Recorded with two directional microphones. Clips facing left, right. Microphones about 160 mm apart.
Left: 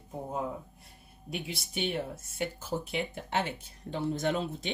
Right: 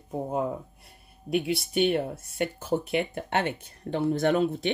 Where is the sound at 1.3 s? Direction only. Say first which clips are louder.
Right 11 dB; 60° right (ahead or behind).